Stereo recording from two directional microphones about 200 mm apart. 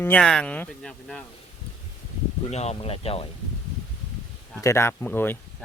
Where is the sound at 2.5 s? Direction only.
35° left (ahead or behind).